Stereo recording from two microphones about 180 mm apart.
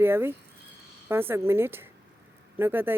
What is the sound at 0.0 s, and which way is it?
Speech, 15° right (ahead or behind).